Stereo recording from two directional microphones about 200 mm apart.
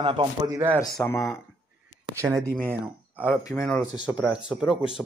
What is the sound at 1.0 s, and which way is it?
Speech, 10° left (ahead or behind).